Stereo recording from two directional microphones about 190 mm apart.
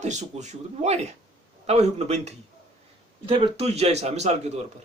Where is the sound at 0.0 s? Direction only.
40° right (ahead or behind).